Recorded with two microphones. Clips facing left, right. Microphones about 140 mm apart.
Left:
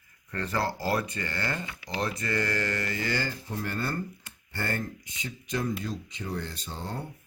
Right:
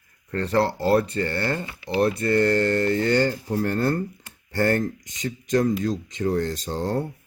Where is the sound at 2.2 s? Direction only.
60° right (ahead or behind).